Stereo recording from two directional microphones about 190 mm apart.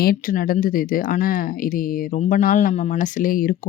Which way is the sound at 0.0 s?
50° left (ahead or behind).